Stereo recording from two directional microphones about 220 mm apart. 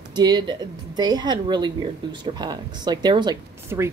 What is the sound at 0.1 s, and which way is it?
A woman's voice, 20° right (ahead or behind).